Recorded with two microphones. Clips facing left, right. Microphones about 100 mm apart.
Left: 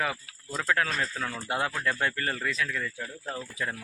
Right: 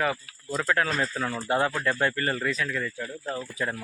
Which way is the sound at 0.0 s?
Centre (ahead or behind).